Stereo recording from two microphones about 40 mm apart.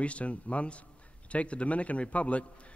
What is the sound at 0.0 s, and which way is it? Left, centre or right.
Speech, left.